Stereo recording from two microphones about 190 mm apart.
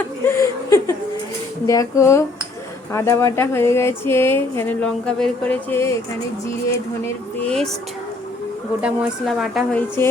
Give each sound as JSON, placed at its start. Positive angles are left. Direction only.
{"t": 0.3, "sound": "speech", "side_deg": 15}
{"t": 7.4, "sound": "a woman's voice", "side_deg": 0}
{"t": 8.8, "sound": "a woman's voice", "side_deg": -5}